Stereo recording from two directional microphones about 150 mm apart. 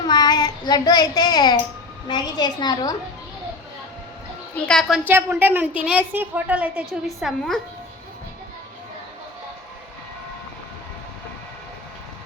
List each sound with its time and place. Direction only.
0.1 s a child's voice: 30° left (ahead or behind)
4.6 s a woman's voice: 5° left (ahead or behind)
5.0 s a woman's voice: 15° right (ahead or behind)